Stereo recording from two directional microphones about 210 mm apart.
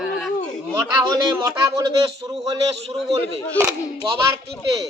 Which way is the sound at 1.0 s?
15° right (ahead or behind).